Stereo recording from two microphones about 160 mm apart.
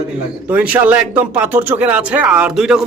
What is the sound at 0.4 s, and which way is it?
A man's voice, 10° right (ahead or behind).